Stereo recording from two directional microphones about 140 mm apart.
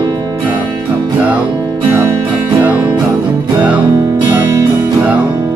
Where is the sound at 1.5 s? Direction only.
30° right (ahead or behind).